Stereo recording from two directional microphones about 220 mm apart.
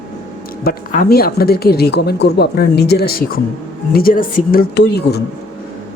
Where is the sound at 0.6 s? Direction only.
45° left (ahead or behind).